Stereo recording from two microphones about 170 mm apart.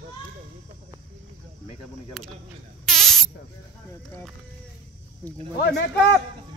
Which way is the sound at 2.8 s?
Centre (ahead or behind).